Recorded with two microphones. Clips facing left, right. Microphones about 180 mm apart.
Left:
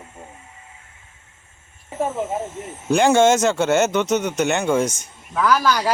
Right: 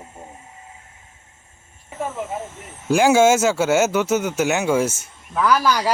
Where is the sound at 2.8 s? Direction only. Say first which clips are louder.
Even; 5° right (ahead or behind).